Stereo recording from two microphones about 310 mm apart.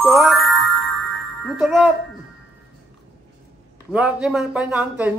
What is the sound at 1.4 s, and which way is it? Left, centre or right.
Speech, centre.